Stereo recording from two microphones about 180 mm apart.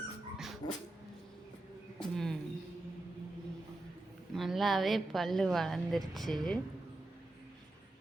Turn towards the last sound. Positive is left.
turn(degrees=0)  # may be behind; listen again after turning